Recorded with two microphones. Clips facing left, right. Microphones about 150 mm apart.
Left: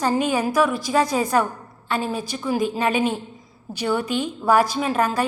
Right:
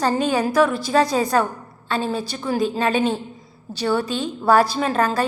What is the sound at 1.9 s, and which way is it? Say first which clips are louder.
A woman's voice: right 1 dB; 15° left (ahead or behind).